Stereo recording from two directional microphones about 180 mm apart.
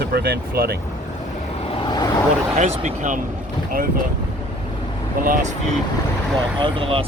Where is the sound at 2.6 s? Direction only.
40° right (ahead or behind).